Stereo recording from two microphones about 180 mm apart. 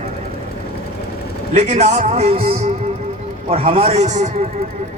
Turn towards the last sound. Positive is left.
turn(degrees=-40)  # may be behind; listen again after turning